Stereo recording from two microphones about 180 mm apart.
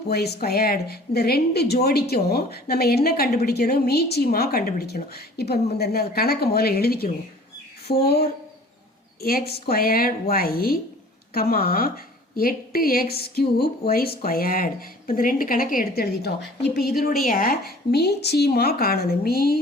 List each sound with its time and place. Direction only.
0.1 s a woman's voice: 60° left (ahead or behind)
9.6 s a woman's voice: 55° left (ahead or behind)